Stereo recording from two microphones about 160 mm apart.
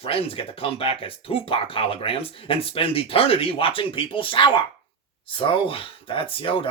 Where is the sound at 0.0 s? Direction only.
35° left (ahead or behind).